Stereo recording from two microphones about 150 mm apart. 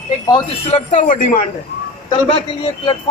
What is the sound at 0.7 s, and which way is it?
Speech, 55° left (ahead or behind).